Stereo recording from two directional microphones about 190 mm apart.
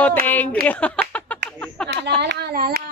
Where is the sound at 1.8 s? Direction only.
60° right (ahead or behind).